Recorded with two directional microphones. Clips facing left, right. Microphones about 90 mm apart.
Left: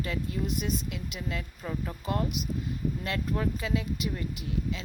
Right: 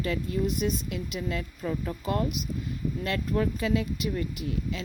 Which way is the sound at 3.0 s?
15° left (ahead or behind).